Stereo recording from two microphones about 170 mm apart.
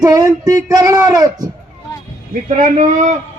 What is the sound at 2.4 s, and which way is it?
Speech, 50° right (ahead or behind).